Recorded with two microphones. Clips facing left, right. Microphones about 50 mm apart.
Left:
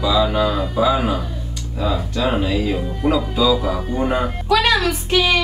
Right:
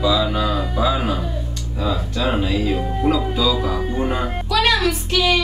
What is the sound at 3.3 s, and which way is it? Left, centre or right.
Speech, centre.